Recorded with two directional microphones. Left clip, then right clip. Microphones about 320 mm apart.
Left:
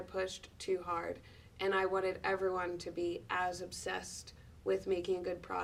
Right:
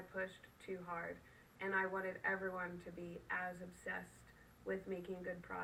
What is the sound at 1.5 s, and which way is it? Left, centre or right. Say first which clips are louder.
Speech: left 7 dB; left.